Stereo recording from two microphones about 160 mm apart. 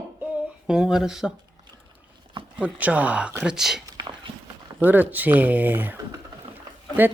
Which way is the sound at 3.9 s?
25° right (ahead or behind).